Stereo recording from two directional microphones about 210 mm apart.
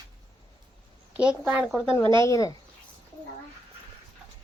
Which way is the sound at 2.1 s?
15° left (ahead or behind).